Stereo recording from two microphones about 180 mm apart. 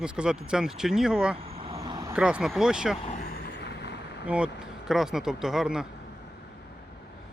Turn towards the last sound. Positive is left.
turn(degrees=-5)  # may be behind; listen again after turning